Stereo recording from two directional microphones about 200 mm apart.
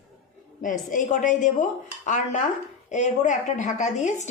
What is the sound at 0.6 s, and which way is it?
A woman's voice, 40° left (ahead or behind).